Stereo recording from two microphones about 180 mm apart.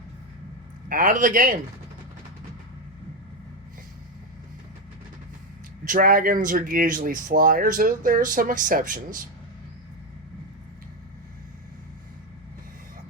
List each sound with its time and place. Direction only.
0.9 s speech: 50° right (ahead or behind)
5.8 s speech: 50° right (ahead or behind)